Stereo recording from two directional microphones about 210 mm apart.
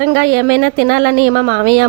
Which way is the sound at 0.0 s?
50° right (ahead or behind).